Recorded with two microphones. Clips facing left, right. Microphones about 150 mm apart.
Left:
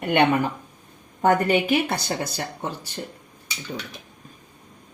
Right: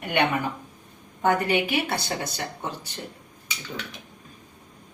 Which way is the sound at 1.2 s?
45° left (ahead or behind).